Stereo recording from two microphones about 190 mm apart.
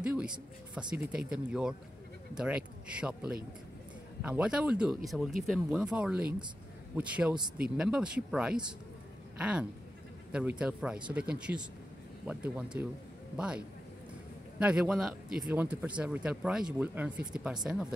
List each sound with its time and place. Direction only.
0.0 s a man's voice: 5° right (ahead or behind)